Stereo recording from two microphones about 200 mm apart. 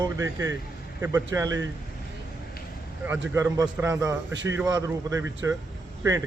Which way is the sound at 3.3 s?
15° right (ahead or behind).